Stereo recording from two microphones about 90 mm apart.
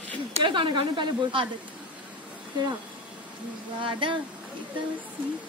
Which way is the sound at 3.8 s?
70° right (ahead or behind).